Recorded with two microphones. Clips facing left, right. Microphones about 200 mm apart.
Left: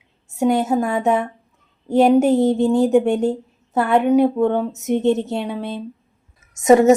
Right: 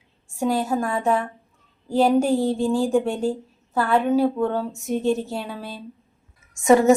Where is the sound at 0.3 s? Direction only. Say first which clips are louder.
Left 5 dB; 20° left (ahead or behind).